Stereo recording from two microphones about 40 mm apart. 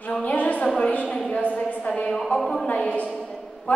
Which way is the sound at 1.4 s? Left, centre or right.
Left.